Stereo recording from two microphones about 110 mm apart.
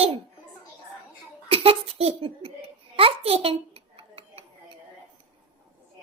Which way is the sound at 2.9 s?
60° right (ahead or behind).